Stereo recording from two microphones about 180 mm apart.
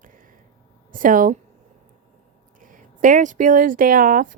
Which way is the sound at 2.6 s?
45° right (ahead or behind).